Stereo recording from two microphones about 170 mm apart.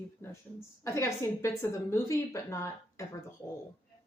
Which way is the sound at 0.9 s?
15° left (ahead or behind).